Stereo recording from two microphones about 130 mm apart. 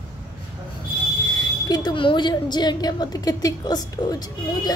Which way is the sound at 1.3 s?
30° left (ahead or behind).